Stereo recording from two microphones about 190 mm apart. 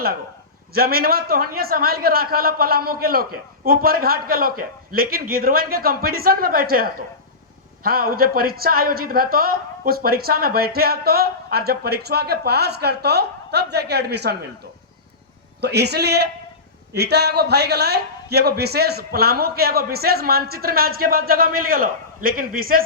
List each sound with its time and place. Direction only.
0.7 s speech: 55° right (ahead or behind)
15.6 s speech: 60° right (ahead or behind)